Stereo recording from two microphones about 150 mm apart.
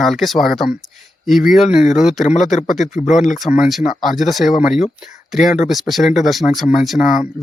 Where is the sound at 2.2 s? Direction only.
50° left (ahead or behind).